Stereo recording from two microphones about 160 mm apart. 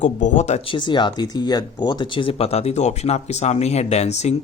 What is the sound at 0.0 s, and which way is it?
Speech, 50° left (ahead or behind).